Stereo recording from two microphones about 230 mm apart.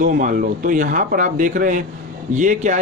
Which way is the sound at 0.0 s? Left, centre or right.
Right.